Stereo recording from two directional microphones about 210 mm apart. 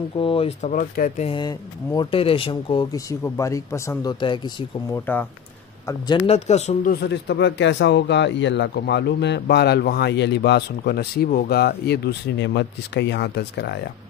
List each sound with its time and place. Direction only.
0.2 s speech: 25° left (ahead or behind)
6.9 s speech: 55° left (ahead or behind)